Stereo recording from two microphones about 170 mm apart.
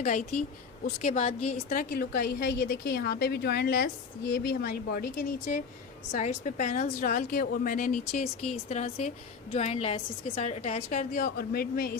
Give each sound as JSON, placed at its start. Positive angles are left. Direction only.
{"t": 0.0, "sound": "a woman's voice", "side_deg": 45}
{"t": 1.8, "sound": "a woman's voice", "side_deg": 60}
{"t": 6.1, "sound": "a woman's voice", "side_deg": 45}